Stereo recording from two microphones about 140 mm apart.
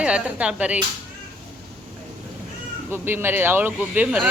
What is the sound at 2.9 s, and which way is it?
Speech, 15° right (ahead or behind).